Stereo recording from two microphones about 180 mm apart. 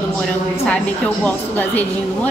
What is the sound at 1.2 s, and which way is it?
Speech, 10° left (ahead or behind).